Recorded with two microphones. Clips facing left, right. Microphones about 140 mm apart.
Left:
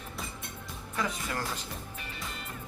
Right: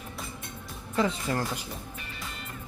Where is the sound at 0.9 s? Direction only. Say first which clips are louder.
Right 6 dB; 30° right (ahead or behind).